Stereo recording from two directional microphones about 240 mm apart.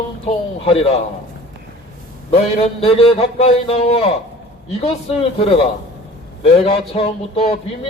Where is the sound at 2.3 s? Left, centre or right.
Left.